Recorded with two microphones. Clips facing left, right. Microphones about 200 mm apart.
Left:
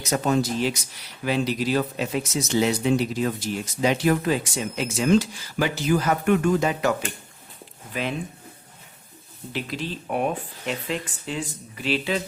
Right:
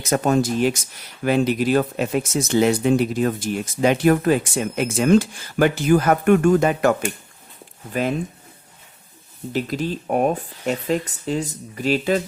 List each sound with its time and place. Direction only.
0.0 s speech: 50° right (ahead or behind)
7.9 s speech: 45° right (ahead or behind)
9.5 s speech: 45° right (ahead or behind)